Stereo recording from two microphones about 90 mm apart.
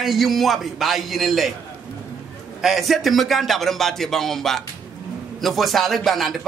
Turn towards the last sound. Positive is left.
turn(degrees=0)  # may be behind; listen again after turning